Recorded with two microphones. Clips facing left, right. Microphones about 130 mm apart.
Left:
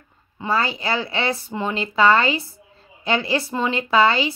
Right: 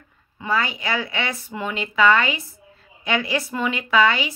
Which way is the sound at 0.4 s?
30° left (ahead or behind).